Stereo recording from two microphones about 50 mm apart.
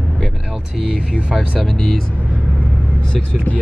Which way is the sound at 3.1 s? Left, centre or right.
Left.